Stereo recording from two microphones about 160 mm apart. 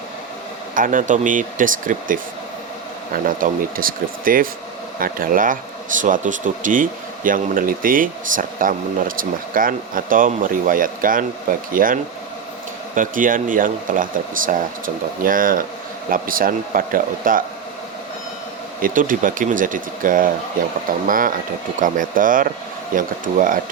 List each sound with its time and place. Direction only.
0.7 s speech: 55° right (ahead or behind)
3.2 s speech: 60° right (ahead or behind)
18.8 s speech: 55° right (ahead or behind)